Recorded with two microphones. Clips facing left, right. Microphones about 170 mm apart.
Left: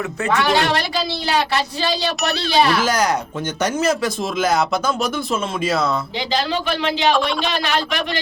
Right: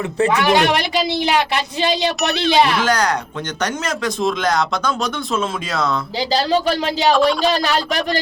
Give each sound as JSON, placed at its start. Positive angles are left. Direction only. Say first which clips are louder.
{"t": 0.3, "sound": "speech", "louder": "right 1 dB", "side_deg": -15}
{"t": 2.8, "sound": "speech", "louder": "even", "side_deg": 10}
{"t": 6.1, "sound": "speech", "louder": "right 4 dB", "side_deg": -40}